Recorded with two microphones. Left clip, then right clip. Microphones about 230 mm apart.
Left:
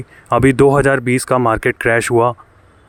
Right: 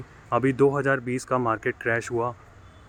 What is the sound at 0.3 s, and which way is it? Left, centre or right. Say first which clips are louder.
Speech: left 10 dB; left.